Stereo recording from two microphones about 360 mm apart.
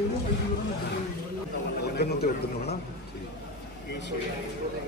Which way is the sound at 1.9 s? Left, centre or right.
Left.